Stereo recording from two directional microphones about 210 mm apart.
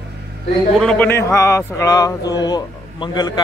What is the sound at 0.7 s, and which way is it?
A man's voice, 5° left (ahead or behind).